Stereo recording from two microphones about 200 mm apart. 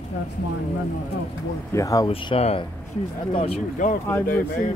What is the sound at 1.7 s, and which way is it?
Speech, 15° left (ahead or behind).